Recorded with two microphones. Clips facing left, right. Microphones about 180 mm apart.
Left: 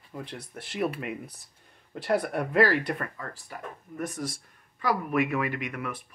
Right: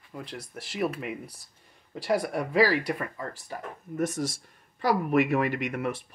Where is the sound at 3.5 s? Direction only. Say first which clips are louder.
Right 5 dB; 30° right (ahead or behind).